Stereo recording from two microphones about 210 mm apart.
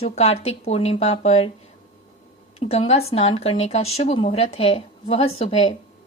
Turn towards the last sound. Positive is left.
turn(degrees=30)  # may be behind; listen again after turning